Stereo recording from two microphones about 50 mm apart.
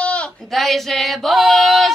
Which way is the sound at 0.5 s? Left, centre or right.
Centre.